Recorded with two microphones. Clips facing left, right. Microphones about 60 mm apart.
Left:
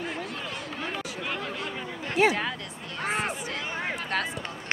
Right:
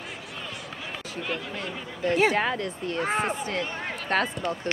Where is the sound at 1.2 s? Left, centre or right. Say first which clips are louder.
Right 3 dB; centre.